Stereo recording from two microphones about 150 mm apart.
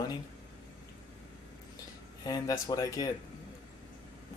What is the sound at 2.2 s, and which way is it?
Speech, 25° left (ahead or behind).